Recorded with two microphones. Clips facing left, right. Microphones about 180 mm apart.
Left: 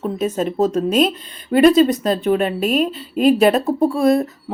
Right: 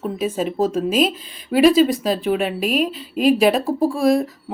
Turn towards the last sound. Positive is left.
turn(degrees=0)  # may be behind; listen again after turning